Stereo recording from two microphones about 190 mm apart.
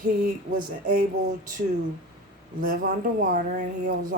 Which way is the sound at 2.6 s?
50° right (ahead or behind).